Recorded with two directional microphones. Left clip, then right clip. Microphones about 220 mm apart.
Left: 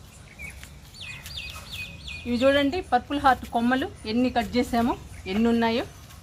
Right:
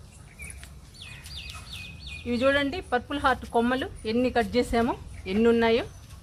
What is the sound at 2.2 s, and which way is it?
Speech, 40° right (ahead or behind).